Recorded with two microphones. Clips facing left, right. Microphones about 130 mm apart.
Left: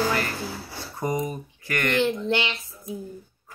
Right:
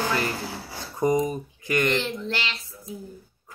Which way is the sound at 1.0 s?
20° right (ahead or behind).